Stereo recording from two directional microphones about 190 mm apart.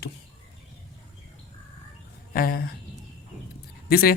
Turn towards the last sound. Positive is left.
turn(degrees=55)  # may be behind; listen again after turning